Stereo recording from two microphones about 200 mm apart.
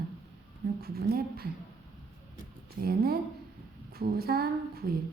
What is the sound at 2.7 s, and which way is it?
A woman's voice, 50° right (ahead or behind).